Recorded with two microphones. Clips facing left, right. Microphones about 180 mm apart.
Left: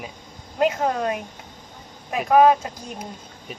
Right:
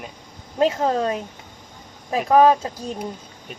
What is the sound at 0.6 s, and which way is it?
Speech, 30° right (ahead or behind).